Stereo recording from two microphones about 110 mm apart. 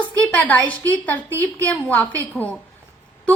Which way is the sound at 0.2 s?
15° left (ahead or behind).